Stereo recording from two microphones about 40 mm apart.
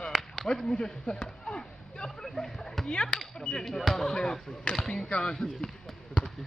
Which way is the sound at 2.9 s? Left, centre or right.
Left.